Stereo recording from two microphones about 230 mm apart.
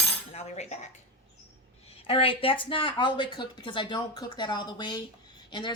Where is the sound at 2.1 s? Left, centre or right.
Left.